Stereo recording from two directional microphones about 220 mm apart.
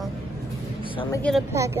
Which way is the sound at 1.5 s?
15° right (ahead or behind).